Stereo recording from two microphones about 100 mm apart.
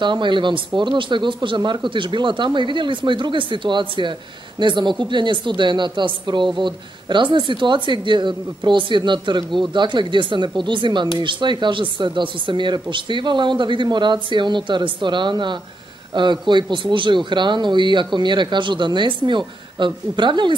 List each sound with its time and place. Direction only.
0.0 s a woman's voice: 50° right (ahead or behind)